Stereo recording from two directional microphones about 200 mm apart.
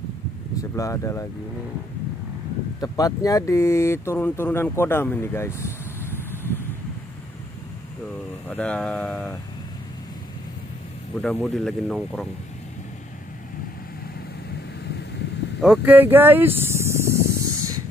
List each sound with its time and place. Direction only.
0.6 s speech: 15° left (ahead or behind)
2.8 s speech: 20° left (ahead or behind)
8.5 s speech: 5° left (ahead or behind)
11.1 s speech: 5° left (ahead or behind)
15.6 s speech: 5° right (ahead or behind)
17.5 s spray: 90° right